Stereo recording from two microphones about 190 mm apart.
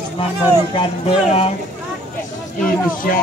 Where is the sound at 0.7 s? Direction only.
30° left (ahead or behind).